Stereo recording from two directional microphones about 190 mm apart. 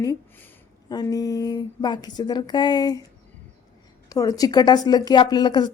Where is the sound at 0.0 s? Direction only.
15° left (ahead or behind).